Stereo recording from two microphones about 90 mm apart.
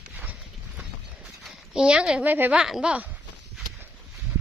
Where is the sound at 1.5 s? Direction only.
10° right (ahead or behind).